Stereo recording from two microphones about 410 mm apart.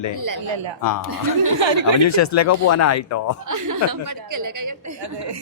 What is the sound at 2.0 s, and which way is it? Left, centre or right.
Speech, left.